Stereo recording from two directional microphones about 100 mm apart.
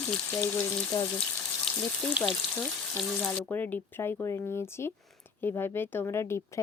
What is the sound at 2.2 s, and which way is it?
Frying, 10° right (ahead or behind).